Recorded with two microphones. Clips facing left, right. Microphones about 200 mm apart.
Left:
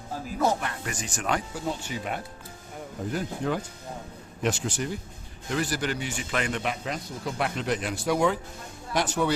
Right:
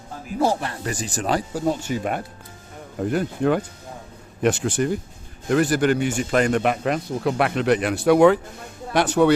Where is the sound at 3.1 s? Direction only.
65° right (ahead or behind).